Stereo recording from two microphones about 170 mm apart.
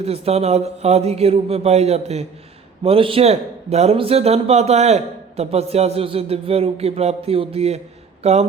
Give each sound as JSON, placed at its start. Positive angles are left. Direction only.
{"t": 0.0, "sound": "a man's voice", "side_deg": -35}